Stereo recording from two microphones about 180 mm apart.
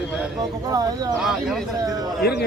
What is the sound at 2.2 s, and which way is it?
Speech, 65° left (ahead or behind).